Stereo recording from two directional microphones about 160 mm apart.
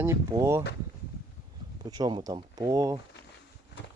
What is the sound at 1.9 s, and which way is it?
Speech, 25° right (ahead or behind).